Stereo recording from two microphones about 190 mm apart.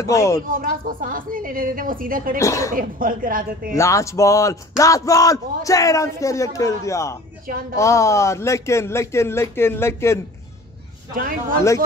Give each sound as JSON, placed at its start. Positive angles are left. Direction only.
{"t": 0.0, "sound": "speech", "side_deg": 15}
{"t": 0.5, "sound": "a woman's voice", "side_deg": -50}
{"t": 2.3, "sound": "speech", "side_deg": 15}
{"t": 2.7, "sound": "a woman's voice", "side_deg": -45}
{"t": 3.7, "sound": "speech", "side_deg": 15}